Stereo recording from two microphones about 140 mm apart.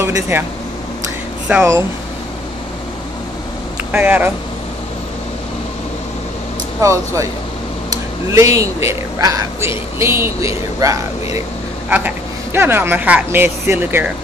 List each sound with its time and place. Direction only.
0.0 s speech: 15° right (ahead or behind)
1.5 s speech: 20° right (ahead or behind)
3.9 s speech: 15° right (ahead or behind)
6.8 s speech: 20° right (ahead or behind)
12.5 s speech: 15° right (ahead or behind)